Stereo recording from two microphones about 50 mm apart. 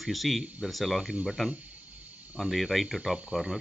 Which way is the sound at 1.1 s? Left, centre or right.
Centre.